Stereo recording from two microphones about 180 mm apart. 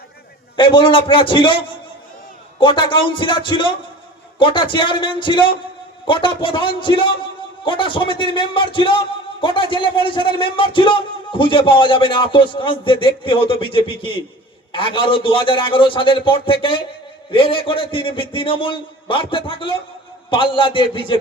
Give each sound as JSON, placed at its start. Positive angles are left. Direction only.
{"t": 0.5, "sound": "a man's voice", "side_deg": 25}